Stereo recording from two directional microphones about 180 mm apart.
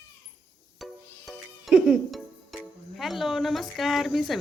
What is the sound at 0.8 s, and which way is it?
Music, centre (ahead or behind).